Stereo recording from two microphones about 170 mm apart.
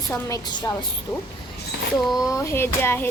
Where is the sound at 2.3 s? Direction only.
15° left (ahead or behind).